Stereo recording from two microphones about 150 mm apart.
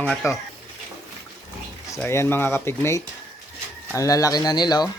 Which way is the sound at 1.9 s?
15° left (ahead or behind).